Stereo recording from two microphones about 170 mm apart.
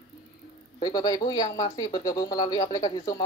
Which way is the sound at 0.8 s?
20° left (ahead or behind).